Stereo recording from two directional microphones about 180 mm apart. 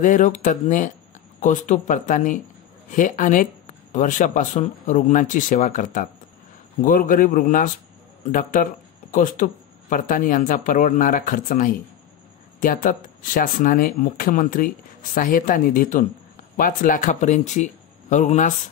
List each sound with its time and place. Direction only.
0.0 s speech: 45° left (ahead or behind)